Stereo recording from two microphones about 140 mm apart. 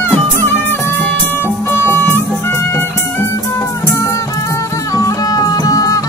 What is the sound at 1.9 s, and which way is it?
Music, 15° left (ahead or behind).